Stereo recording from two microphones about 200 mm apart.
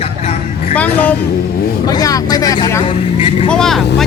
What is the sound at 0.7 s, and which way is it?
Speech, 10° left (ahead or behind).